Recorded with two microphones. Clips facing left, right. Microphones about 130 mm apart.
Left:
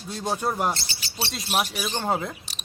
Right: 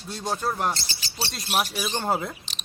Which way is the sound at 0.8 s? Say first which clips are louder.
Even; 40° right (ahead or behind).